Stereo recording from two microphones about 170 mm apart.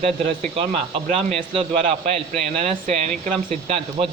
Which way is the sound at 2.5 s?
40° right (ahead or behind).